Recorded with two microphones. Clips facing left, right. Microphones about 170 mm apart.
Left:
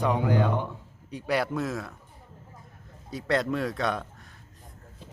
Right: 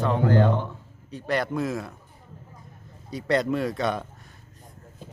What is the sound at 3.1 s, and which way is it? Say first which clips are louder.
Speech: right 3 dB; centre (ahead or behind).